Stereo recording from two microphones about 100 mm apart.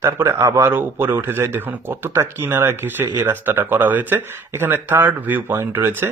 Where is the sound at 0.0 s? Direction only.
25° right (ahead or behind).